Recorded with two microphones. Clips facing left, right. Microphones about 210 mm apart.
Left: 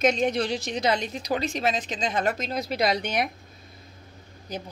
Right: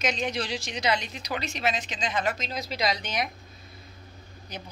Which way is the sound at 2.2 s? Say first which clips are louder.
Left 3 dB; 55° left (ahead or behind).